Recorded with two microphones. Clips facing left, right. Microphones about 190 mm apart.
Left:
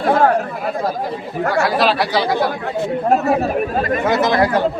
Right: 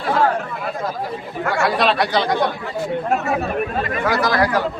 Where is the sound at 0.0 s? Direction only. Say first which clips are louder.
Left 4 dB; 45° left (ahead or behind).